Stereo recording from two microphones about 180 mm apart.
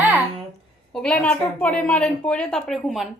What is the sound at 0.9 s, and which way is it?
A woman's voice, 5° left (ahead or behind).